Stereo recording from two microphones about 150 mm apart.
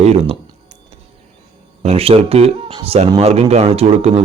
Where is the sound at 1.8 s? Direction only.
40° right (ahead or behind).